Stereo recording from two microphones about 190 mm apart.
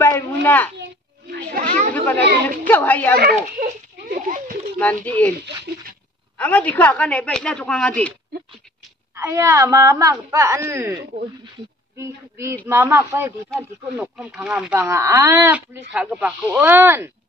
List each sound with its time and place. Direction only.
0.4 s a child's voice: 10° left (ahead or behind)
1.5 s chatter: 45° right (ahead or behind)
2.1 s a woman's voice: 60° right (ahead or behind)
2.6 s a woman's voice: 10° left (ahead or behind)
3.2 s a sound: 50° right (ahead or behind)
4.7 s a woman's voice: 10° left (ahead or behind)
6.3 s a woman's voice: 10° left (ahead or behind)
9.1 s speech: 15° right (ahead or behind)
12.0 s speech: 15° right (ahead or behind)
13.9 s speech: centre (ahead or behind)